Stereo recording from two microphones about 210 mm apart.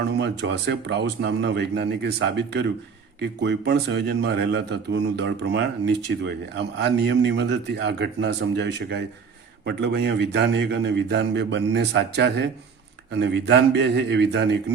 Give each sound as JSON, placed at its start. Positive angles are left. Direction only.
{"t": 0.2, "sound": "a man's voice", "side_deg": -55}